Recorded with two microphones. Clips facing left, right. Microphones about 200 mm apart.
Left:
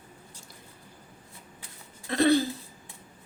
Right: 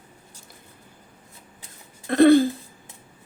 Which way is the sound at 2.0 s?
55° right (ahead or behind).